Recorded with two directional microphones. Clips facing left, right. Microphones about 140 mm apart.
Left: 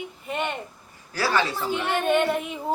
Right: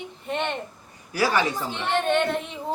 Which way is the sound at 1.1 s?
15° right (ahead or behind).